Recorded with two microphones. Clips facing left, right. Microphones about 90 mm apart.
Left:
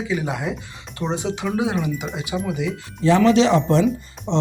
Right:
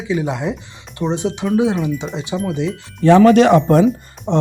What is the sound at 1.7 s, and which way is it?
Speech, 25° right (ahead or behind).